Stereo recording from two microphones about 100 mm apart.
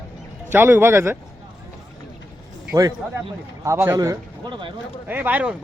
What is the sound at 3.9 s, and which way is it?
Speech, 35° right (ahead or behind).